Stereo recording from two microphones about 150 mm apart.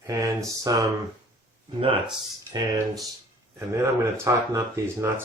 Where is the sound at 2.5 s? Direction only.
25° right (ahead or behind).